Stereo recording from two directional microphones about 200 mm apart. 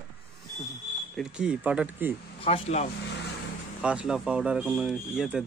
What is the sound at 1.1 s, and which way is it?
Speech, 5° right (ahead or behind).